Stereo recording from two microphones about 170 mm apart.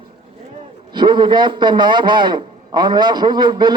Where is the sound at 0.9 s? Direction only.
25° right (ahead or behind).